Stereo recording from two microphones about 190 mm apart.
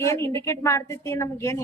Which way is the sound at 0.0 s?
15° left (ahead or behind).